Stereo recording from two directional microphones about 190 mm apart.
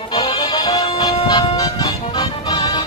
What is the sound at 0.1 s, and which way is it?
Music, 25° left (ahead or behind).